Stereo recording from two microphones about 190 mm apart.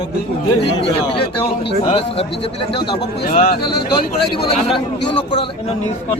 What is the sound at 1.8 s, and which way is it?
Speech, 30° left (ahead or behind).